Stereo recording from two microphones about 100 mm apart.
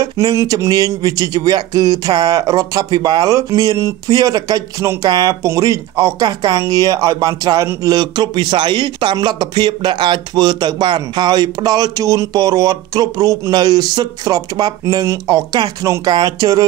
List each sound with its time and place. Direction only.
0.0 s speech: 35° right (ahead or behind)